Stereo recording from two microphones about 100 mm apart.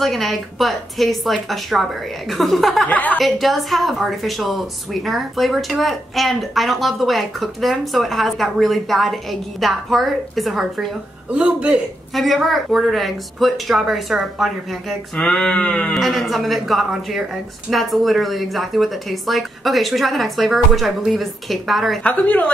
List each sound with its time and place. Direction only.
0.0 s a woman's voice: centre (ahead or behind)
2.9 s speech: 15° left (ahead or behind)
3.2 s a woman's voice: centre (ahead or behind)
12.1 s a woman's voice: centre (ahead or behind)
15.1 s speech: 10° left (ahead or behind)
15.9 s a woman's voice: centre (ahead or behind)
22.0 s speech: 15° left (ahead or behind)